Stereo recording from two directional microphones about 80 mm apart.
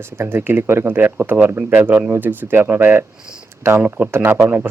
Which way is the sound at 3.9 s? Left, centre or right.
Centre.